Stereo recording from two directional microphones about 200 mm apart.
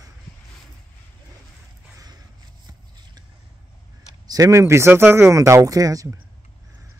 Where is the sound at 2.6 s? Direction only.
20° right (ahead or behind).